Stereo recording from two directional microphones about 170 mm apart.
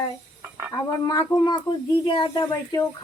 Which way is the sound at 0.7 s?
20° left (ahead or behind).